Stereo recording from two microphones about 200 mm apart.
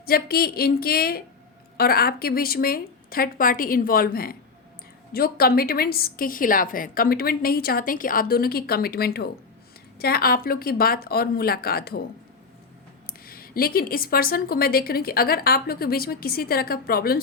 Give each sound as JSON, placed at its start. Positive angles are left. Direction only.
{"t": 0.0, "sound": "a woman's voice", "side_deg": 50}
{"t": 13.2, "sound": "a woman's voice", "side_deg": 50}